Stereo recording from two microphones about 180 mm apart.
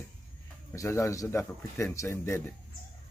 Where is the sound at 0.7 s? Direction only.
15° left (ahead or behind).